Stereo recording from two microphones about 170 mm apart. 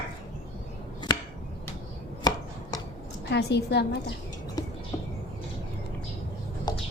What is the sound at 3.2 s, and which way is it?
Speech, 85° left.